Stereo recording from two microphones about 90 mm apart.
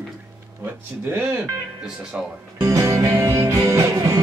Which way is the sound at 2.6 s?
35° right (ahead or behind).